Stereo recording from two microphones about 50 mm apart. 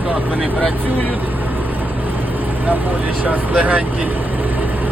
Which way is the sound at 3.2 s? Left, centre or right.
Right.